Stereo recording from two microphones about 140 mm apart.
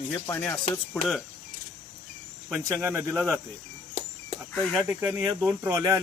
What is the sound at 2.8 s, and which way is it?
Speech, 15° right (ahead or behind).